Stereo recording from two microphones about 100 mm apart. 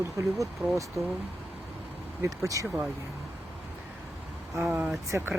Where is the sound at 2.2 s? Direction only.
30° right (ahead or behind).